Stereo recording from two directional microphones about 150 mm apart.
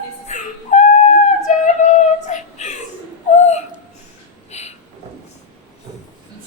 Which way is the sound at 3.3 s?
50° left (ahead or behind).